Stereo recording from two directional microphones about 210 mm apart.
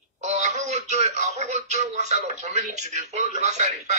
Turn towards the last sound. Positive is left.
turn(degrees=-35)  # may be behind; listen again after turning